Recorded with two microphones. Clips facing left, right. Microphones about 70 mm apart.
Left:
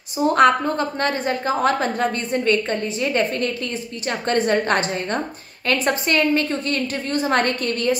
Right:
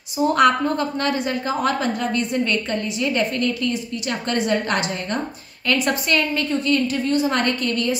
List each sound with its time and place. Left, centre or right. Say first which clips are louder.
0.3 s a woman's voice: left 2 dB; left